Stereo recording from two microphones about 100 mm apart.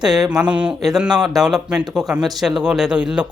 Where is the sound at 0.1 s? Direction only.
5° right (ahead or behind).